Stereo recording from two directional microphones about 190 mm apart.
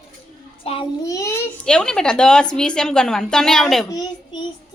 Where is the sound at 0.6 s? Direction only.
30° left (ahead or behind).